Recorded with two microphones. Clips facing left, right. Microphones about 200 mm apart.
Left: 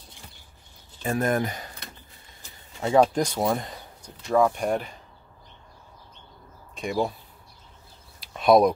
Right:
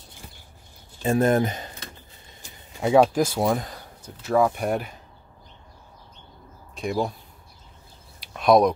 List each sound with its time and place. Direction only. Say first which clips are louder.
1.0 s speech: right 5 dB; 25° right (ahead or behind)
2.8 s speech: right 2 dB; 10° right (ahead or behind)
6.7 s speech: right 1 dB; centre (ahead or behind)
8.2 s a sound: even; centre (ahead or behind)